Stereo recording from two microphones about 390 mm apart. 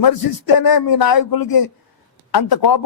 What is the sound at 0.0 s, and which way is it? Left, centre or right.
A man's voice, left.